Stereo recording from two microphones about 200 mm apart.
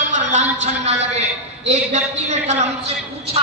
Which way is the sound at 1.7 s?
35° right (ahead or behind).